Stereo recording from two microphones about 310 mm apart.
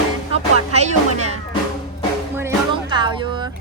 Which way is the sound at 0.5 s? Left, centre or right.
Right.